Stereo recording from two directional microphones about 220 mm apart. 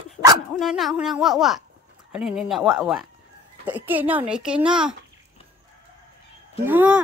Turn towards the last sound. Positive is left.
turn(degrees=-5)  # may be behind; listen again after turning